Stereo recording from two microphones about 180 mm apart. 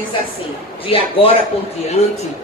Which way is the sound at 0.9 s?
35° left (ahead or behind).